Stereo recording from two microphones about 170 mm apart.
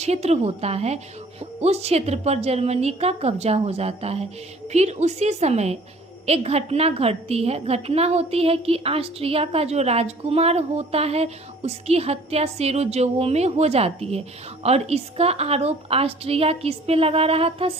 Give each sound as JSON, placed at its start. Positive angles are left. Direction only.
{"t": 0.0, "sound": "a woman's voice", "side_deg": -40}